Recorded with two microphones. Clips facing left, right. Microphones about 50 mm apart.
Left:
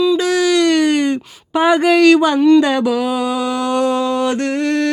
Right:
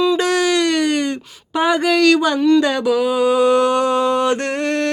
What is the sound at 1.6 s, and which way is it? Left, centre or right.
Speech, centre.